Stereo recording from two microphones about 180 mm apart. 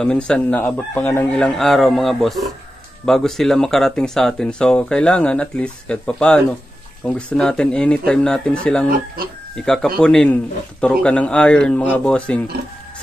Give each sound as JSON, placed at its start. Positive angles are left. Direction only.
{"t": 0.0, "sound": "speech", "side_deg": 5}
{"t": 9.2, "sound": "speech", "side_deg": -55}
{"t": 9.6, "sound": "speech", "side_deg": 5}